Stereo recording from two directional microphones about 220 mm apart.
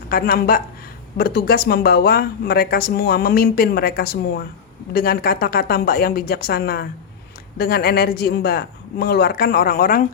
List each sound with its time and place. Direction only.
0.1 s speech: 40° left (ahead or behind)